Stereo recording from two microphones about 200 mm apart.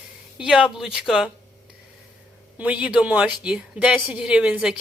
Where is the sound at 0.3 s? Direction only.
5° right (ahead or behind).